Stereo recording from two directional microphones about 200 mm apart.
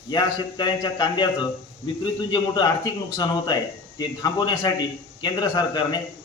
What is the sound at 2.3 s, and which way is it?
A man's voice, 20° left (ahead or behind).